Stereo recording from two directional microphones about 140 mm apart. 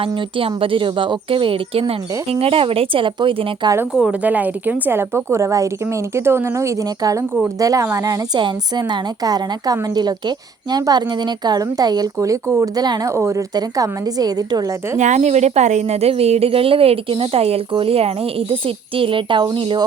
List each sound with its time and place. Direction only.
0.0 s speech: 35° right (ahead or behind)
3.9 s a woman's voice: 10° right (ahead or behind); by 14.9 s 25° right (ahead or behind)
14.9 s a woman's voice: 60° right (ahead or behind); by 19.8 s 40° right (ahead or behind)